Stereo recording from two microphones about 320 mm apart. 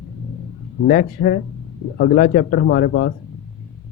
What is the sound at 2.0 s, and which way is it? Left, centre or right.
Speech, left.